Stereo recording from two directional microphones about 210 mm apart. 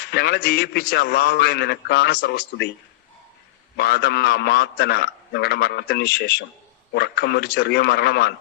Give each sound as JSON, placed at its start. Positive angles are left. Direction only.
{"t": 0.0, "sound": "a man's voice", "side_deg": 50}
{"t": 3.8, "sound": "a man's voice", "side_deg": 50}